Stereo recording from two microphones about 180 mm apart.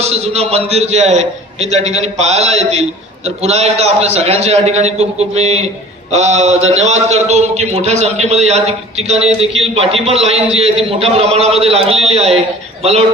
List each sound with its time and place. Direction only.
0.0 s a man's voice: 35° right (ahead or behind)